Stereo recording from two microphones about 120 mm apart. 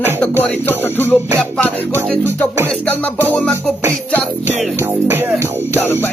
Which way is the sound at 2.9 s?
15° left (ahead or behind).